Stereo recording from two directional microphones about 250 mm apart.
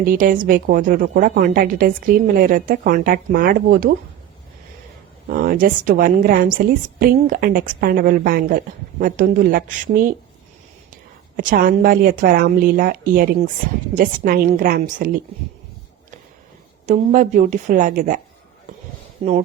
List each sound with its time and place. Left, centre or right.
0.1 s a woman's voice: right
5.3 s a woman's voice: right
11.3 s a woman's voice: right
16.8 s a woman's voice: right